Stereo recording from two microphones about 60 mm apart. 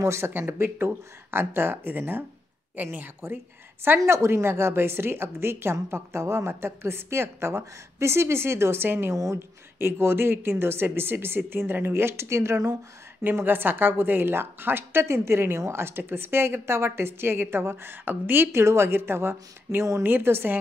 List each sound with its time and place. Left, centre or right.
0.0 s speech: right
4.0 s a woman's voice: right
9.1 s speech: right
9.8 s speech: right
13.2 s speech: right